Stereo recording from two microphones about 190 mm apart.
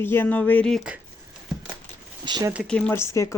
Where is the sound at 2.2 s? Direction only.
20° right (ahead or behind).